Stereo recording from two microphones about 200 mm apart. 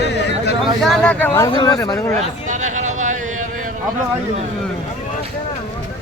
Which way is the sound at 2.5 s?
35° right (ahead or behind).